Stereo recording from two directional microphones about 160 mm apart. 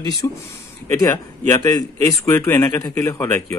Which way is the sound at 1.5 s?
20° left (ahead or behind).